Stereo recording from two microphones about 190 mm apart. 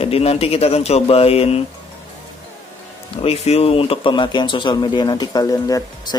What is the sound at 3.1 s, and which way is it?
Speech, 30° left (ahead or behind).